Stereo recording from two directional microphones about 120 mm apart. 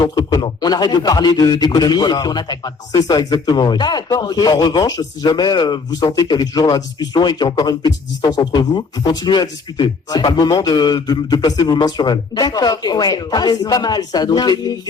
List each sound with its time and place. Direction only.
0.0 s speech: 35° left (ahead or behind)